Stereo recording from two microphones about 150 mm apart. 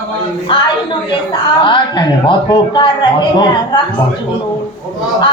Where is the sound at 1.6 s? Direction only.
30° left (ahead or behind).